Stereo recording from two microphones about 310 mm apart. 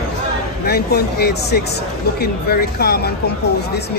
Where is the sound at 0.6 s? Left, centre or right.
Left.